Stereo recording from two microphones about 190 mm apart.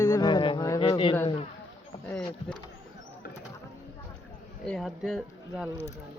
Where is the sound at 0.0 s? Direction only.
20° left (ahead or behind).